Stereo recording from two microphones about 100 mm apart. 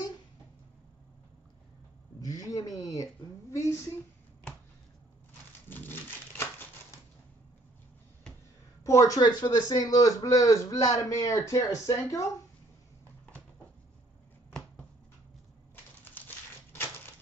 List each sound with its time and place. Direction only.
2.1 s speech: 40° left (ahead or behind)
5.7 s a sound: 20° left (ahead or behind)
8.8 s a man's voice: 35° left (ahead or behind)
15.7 s crushing: 20° left (ahead or behind)